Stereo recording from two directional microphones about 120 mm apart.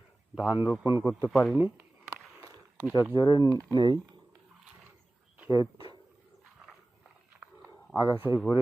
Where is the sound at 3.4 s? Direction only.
30° right (ahead or behind).